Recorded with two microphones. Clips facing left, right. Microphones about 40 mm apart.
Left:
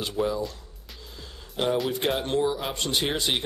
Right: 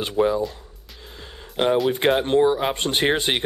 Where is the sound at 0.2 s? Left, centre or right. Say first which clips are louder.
Right 7 dB; right.